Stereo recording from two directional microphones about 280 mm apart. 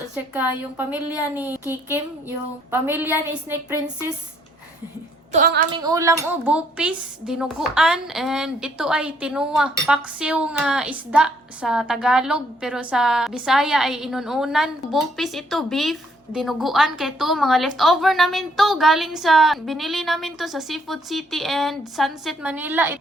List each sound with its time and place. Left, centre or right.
0.3 s a woman's voice: centre
5.3 s a woman's voice: right
5.7 s a woman's voice: centre